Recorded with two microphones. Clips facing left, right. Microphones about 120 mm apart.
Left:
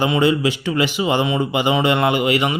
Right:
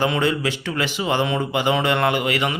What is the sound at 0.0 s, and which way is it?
Speech, 15° left (ahead or behind).